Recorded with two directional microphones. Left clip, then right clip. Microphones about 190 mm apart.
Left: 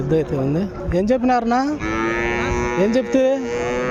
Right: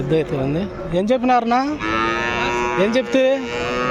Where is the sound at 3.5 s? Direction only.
60° left (ahead or behind).